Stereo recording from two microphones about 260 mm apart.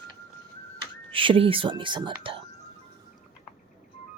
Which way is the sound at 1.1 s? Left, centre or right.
Centre.